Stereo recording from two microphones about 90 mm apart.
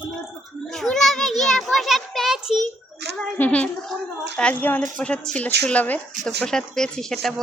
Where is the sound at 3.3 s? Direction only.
20° left (ahead or behind).